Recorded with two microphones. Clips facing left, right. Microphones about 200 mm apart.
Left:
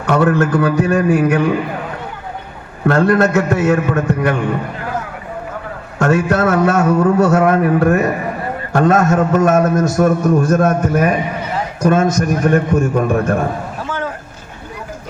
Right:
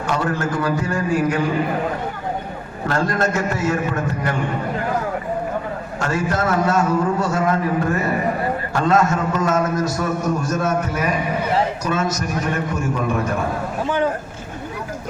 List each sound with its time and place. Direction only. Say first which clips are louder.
0.1 s a man's voice: left 9 dB; 65° left (ahead or behind)
2.8 s a man's voice: left 8 dB; 60° left (ahead or behind)
6.0 s a man's voice: left 8 dB; 65° left (ahead or behind)